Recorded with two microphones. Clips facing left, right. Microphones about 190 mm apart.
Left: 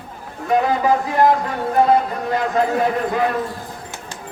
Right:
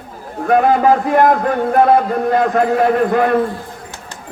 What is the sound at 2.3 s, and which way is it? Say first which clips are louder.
Speech: right 3 dB; 55° right (ahead or behind).